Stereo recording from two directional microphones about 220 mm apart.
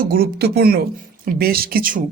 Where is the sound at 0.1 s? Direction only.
45° right (ahead or behind).